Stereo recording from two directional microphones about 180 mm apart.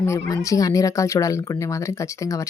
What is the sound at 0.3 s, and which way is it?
A woman's voice, 20° left (ahead or behind).